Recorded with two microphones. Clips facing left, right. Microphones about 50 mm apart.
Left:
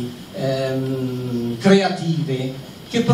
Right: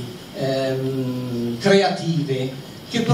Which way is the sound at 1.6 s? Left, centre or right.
Left.